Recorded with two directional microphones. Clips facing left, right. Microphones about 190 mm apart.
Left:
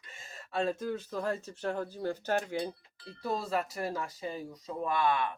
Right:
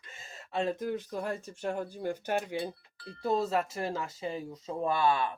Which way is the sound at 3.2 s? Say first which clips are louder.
Right 4 dB; 20° right (ahead or behind).